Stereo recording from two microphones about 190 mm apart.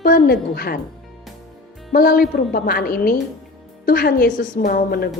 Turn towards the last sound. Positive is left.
turn(degrees=50)  # may be behind; listen again after turning